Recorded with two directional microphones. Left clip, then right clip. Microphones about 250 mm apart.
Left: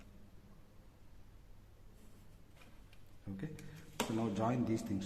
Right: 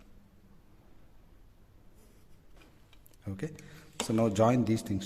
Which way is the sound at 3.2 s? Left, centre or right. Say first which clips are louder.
Right 8 dB; right.